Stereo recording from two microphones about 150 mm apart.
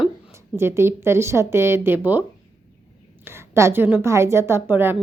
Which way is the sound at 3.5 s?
20° right (ahead or behind).